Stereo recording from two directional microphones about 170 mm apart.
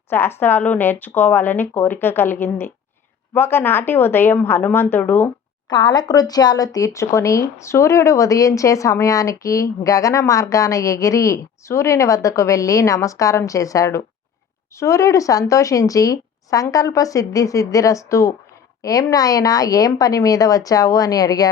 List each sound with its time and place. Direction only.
0.1 s speech: 15° left (ahead or behind)
5.6 s speech: 25° left (ahead or behind)